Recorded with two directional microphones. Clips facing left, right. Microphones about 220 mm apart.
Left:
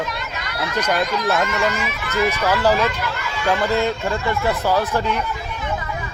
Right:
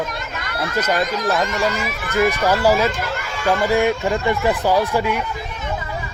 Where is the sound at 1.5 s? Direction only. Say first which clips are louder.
Right 1 dB; 40° right (ahead or behind).